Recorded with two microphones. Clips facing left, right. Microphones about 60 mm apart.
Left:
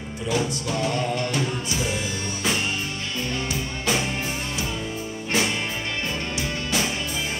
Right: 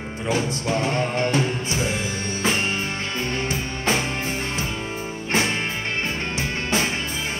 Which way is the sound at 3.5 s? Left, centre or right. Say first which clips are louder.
Right 2 dB; right.